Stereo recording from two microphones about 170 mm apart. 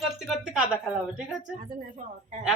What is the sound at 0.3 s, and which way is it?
Speech, 5° right (ahead or behind).